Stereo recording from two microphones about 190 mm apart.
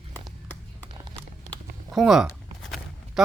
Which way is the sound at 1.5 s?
Centre (ahead or behind).